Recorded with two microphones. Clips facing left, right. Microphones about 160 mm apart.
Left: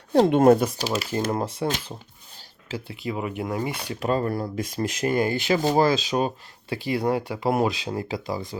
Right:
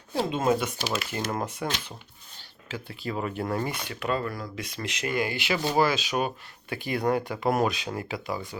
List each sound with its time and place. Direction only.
0.3 s speech: 60° left (ahead or behind)
0.6 s speech: 35° left (ahead or behind)
2.6 s speech: 35° left (ahead or behind)
2.9 s speech: 20° left (ahead or behind)
3.7 s speech: 35° left (ahead or behind)
4.5 s speech: 45° left (ahead or behind)